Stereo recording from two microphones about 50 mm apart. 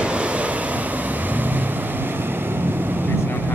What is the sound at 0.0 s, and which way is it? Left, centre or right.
Waves, right.